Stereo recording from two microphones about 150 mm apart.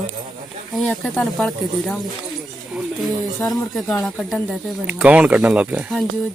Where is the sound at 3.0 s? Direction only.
Centre (ahead or behind).